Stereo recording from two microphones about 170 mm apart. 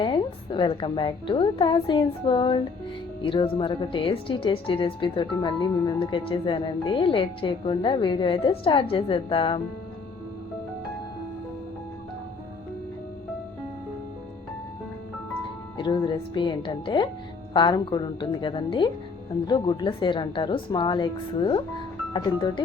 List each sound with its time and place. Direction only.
0.0 s a woman's voice: 30° left (ahead or behind)
15.8 s a woman's voice: 30° left (ahead or behind)